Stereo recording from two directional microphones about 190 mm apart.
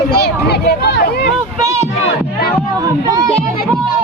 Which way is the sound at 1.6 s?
15° right (ahead or behind).